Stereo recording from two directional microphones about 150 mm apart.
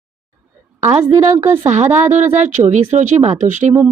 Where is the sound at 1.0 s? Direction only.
20° right (ahead or behind).